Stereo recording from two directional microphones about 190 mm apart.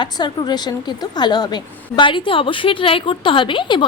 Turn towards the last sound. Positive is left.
turn(degrees=25)  # may be behind; listen again after turning